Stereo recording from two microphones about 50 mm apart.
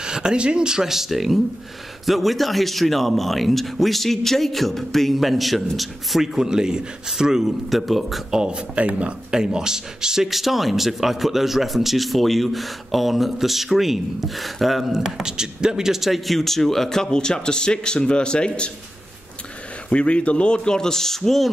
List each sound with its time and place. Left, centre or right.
0.0 s a man's voice: centre
8.3 s speech: centre
9.3 s speech: centre
19.9 s speech: left; by 21.5 s centre